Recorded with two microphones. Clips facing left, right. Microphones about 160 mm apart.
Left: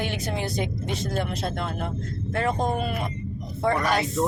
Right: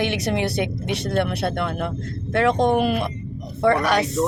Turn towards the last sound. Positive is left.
turn(degrees=-75)  # may be behind; listen again after turning